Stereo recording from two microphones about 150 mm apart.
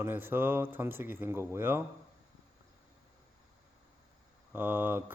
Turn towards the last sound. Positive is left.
turn(degrees=-15)  # may be behind; listen again after turning